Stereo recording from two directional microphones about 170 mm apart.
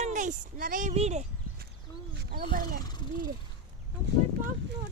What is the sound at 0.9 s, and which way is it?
Speech, 40° right (ahead or behind).